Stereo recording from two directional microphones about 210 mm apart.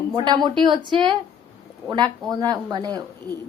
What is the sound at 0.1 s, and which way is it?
Speech, 20° right (ahead or behind).